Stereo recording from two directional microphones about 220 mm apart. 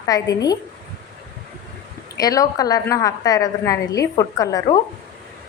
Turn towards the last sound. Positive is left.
turn(degrees=15)  # may be behind; listen again after turning